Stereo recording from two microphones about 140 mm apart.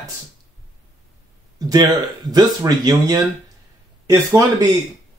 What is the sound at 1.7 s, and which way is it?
Speech, 25° right (ahead or behind).